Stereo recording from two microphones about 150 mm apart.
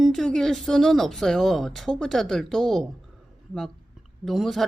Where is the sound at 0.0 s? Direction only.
5° left (ahead or behind).